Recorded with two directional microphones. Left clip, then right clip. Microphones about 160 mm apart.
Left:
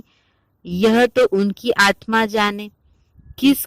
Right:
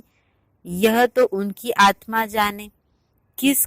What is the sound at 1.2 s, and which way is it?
A woman's voice, 45° left (ahead or behind).